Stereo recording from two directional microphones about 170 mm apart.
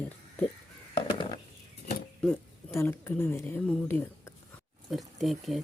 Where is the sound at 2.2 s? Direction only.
15° left (ahead or behind).